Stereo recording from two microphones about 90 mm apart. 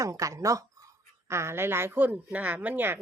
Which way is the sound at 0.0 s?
40° right (ahead or behind).